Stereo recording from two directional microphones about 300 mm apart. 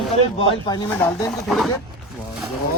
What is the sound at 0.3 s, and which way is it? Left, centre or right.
Speech, centre.